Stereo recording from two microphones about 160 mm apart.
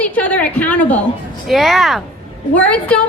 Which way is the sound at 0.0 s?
10° left (ahead or behind).